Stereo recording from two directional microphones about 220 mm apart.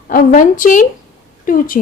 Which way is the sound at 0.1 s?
35° left (ahead or behind).